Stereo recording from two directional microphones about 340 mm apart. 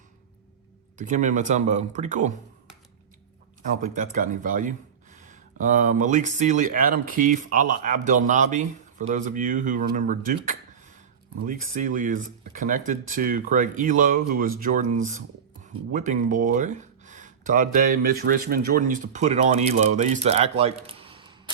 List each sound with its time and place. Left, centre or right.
0.9 s speech: right
3.8 s speech: right
15.9 s speech: right